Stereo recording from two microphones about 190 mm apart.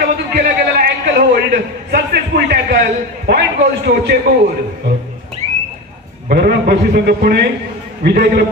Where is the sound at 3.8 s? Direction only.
60° right (ahead or behind).